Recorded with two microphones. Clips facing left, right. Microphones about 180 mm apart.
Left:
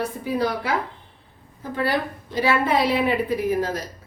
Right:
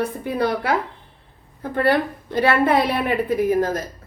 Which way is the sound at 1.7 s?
60° right (ahead or behind).